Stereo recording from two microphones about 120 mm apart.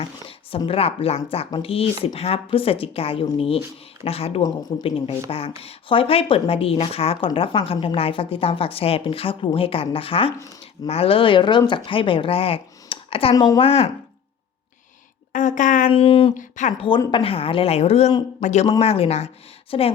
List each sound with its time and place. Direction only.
0.0 s speech: 50° left (ahead or behind)
15.3 s a woman's voice: 90° left
15.9 s speech: 50° left (ahead or behind)
16.3 s a woman's voice: 90° left
16.7 s speech: 45° left (ahead or behind); by 18.1 s 60° left (ahead or behind)
18.4 s speech: 70° left (ahead or behind)
18.8 s speech: 55° left (ahead or behind)